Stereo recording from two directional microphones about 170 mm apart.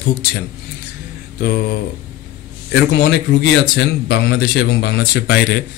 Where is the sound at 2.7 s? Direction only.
70° left (ahead or behind).